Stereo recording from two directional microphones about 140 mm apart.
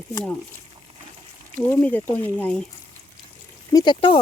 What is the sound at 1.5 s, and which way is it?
Speech, 15° left (ahead or behind).